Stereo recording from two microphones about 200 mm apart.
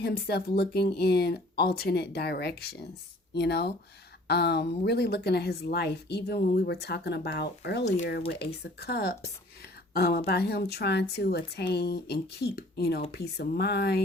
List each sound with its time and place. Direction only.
0.0 s speech: 55° left (ahead or behind)